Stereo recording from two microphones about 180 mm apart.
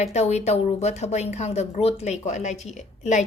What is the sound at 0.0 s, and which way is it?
A woman's voice, 40° left (ahead or behind).